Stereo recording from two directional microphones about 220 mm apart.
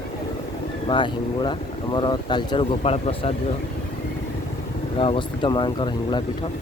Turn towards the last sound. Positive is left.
turn(degrees=20)  # may be behind; listen again after turning